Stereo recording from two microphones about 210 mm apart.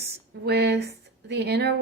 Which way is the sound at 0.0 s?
50° right (ahead or behind).